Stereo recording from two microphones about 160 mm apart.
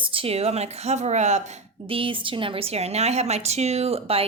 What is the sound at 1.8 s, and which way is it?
A woman's voice, 35° right (ahead or behind).